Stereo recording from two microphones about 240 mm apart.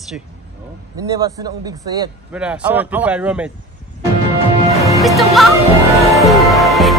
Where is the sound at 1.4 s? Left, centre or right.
Centre.